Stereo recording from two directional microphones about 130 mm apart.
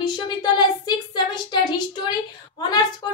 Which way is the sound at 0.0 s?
35° left (ahead or behind).